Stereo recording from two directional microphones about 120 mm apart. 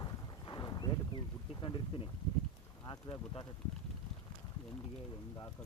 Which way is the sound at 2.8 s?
40° left (ahead or behind).